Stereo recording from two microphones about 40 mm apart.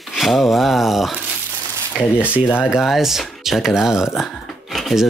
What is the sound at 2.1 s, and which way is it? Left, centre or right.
Speech, right.